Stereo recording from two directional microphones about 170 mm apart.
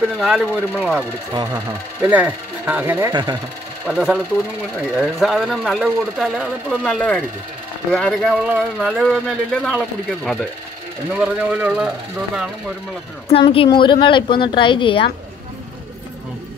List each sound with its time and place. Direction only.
0.2 s speech: centre (ahead or behind)
1.3 s speech: 25° right (ahead or behind)
2.0 s speech: 10° right (ahead or behind)
3.1 s speech: 25° right (ahead or behind)
3.8 s speech: centre (ahead or behind)
13.3 s a woman's voice: 35° left (ahead or behind)